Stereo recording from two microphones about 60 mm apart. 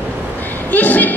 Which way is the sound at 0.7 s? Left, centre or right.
Left.